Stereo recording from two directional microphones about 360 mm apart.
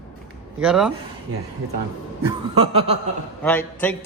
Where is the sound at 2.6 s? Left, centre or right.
Centre.